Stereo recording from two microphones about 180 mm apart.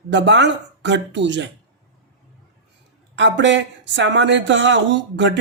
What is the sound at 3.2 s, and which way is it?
Speech, 80° right.